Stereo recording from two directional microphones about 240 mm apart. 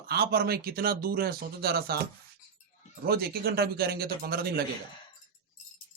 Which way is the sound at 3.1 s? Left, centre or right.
Right.